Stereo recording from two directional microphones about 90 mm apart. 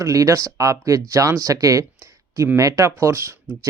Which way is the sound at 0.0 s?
35° right (ahead or behind).